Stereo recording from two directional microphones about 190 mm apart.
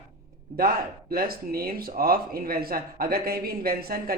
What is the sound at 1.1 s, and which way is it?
A man's voice, 50° right (ahead or behind).